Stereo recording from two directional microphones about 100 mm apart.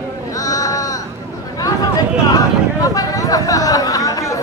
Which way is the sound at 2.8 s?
35° left (ahead or behind).